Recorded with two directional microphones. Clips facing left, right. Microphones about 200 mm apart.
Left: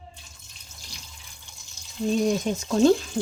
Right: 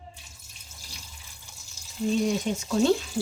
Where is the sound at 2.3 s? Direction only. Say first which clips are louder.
Left 2 dB; 45° left (ahead or behind).